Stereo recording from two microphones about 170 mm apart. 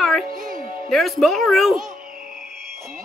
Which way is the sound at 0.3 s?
55° right (ahead or behind).